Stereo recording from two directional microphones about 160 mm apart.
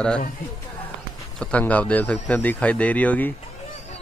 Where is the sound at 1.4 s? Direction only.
10° left (ahead or behind).